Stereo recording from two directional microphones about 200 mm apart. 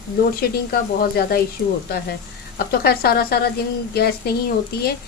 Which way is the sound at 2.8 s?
50° left (ahead or behind).